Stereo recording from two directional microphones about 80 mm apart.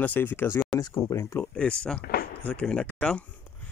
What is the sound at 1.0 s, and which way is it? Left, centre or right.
Speech, left.